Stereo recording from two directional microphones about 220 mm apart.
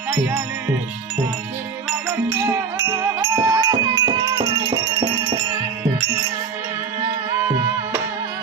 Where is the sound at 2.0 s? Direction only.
10° right (ahead or behind).